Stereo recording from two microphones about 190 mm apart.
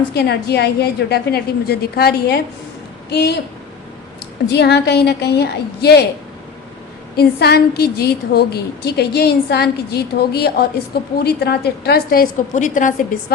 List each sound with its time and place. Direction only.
0.1 s a woman's voice: 60° left (ahead or behind)
4.4 s a woman's voice: 60° left (ahead or behind)
7.2 s a woman's voice: 60° left (ahead or behind)